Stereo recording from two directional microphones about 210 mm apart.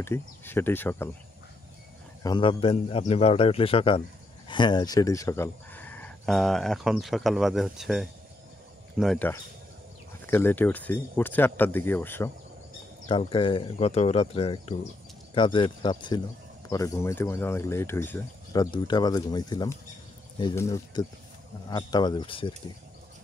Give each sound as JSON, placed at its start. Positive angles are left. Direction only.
{"t": 0.0, "sound": "speech", "side_deg": 10}
{"t": 2.2, "sound": "a man's voice", "side_deg": 25}
{"t": 13.1, "sound": "a man's voice", "side_deg": 25}